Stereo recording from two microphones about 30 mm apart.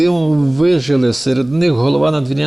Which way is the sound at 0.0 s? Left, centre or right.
Centre.